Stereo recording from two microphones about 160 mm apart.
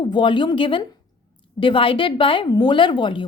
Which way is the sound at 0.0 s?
30° left (ahead or behind).